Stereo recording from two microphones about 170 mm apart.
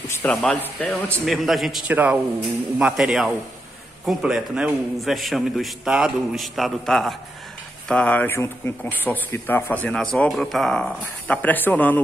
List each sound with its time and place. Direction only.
0.1 s a man's voice: 5° left (ahead or behind)